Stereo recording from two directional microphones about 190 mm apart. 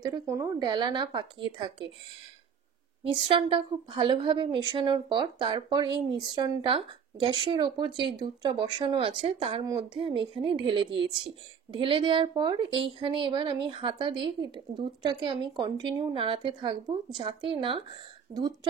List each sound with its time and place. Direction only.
0.0 s speech: 15° right (ahead or behind)
3.1 s speech: 25° right (ahead or behind)